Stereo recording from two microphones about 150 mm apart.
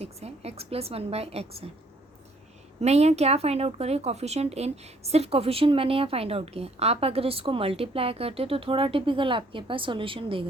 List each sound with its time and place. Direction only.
0.0 s a woman's voice: 45° right (ahead or behind)
2.8 s speech: 45° right (ahead or behind)